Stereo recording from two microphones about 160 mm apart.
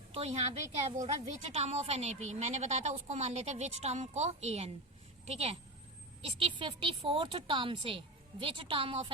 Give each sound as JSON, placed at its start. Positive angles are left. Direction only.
{"t": 0.1, "sound": "a woman's voice", "side_deg": -40}